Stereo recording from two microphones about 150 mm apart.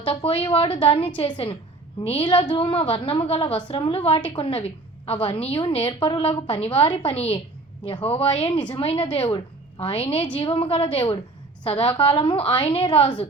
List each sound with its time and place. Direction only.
0.0 s a woman's voice: 40° left (ahead or behind)